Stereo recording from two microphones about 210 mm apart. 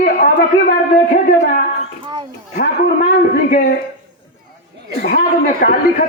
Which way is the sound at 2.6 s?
35° left (ahead or behind).